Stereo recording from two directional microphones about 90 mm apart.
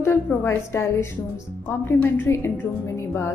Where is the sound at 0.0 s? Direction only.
25° left (ahead or behind).